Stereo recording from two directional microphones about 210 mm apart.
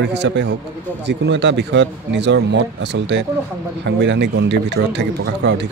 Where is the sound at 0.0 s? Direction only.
55° right (ahead or behind).